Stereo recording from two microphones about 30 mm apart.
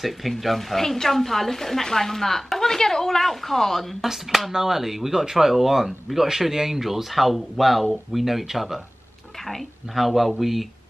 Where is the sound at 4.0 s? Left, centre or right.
Centre.